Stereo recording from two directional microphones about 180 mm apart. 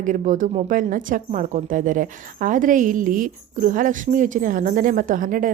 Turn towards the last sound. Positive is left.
turn(degrees=-50)  # may be behind; listen again after turning